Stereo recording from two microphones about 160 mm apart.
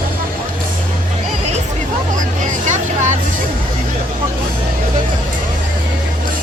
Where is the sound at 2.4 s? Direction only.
50° right (ahead or behind).